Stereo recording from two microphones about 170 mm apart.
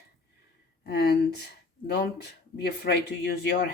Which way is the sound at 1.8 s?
75° left (ahead or behind).